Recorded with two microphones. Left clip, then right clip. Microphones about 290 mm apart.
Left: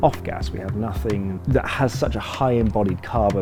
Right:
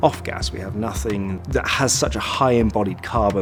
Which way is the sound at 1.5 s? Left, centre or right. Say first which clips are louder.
Right 2 dB; left.